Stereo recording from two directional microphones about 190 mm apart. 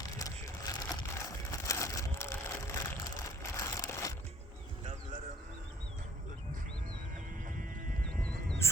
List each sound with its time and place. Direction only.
0.2 s a sound: 15° left (ahead or behind)
7.4 s music: 45° right (ahead or behind)
8.3 s music: 10° left (ahead or behind)